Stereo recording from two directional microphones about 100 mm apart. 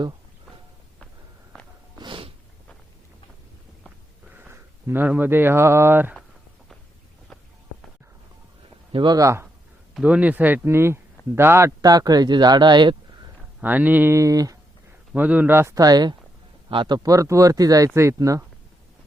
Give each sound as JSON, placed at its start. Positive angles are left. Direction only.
{"t": 2.0, "sound": "snort", "side_deg": -60}
{"t": 4.4, "sound": "speech", "side_deg": -20}
{"t": 8.9, "sound": "speech", "side_deg": -55}
{"t": 9.1, "sound": "speech", "side_deg": -30}
{"t": 9.9, "sound": "speech", "side_deg": -10}
{"t": 11.8, "sound": "speech", "side_deg": -40}
{"t": 13.6, "sound": "speech", "side_deg": -15}
{"t": 14.2, "sound": "speech", "side_deg": -35}
{"t": 15.1, "sound": "speech", "side_deg": -15}
{"t": 15.7, "sound": "speech", "side_deg": -40}
{"t": 16.6, "sound": "a man's voice", "side_deg": -55}
{"t": 17.0, "sound": "speech", "side_deg": -35}